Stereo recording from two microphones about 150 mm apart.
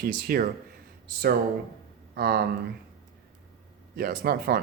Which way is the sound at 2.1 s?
90° right.